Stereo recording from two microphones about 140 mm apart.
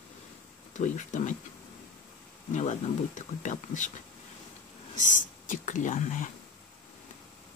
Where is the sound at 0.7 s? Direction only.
60° left (ahead or behind).